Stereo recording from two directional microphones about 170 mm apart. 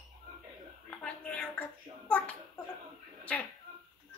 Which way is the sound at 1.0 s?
5° left (ahead or behind).